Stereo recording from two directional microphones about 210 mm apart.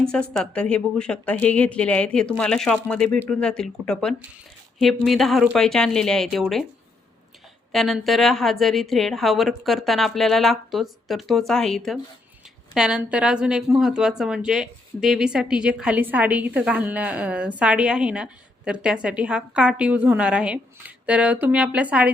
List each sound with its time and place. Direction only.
0.0 s a woman's voice: 5° left (ahead or behind)
7.7 s a woman's voice: centre (ahead or behind)